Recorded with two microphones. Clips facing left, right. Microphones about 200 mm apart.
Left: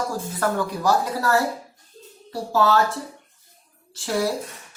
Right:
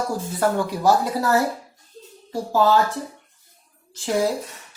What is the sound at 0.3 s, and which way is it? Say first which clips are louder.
Speech: right 3 dB; 20° right (ahead or behind).